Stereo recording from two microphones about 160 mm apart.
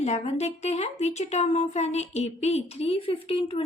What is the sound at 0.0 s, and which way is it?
A woman's voice, 45° left (ahead or behind).